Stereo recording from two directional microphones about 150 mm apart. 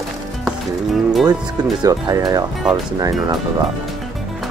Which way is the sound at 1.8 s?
25° right (ahead or behind).